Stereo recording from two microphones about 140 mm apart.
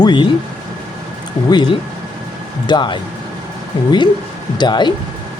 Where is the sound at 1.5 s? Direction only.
35° left (ahead or behind).